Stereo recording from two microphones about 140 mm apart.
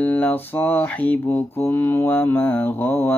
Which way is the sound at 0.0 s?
10° left (ahead or behind).